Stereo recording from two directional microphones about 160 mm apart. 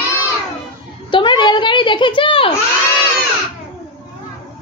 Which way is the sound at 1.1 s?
30° left (ahead or behind).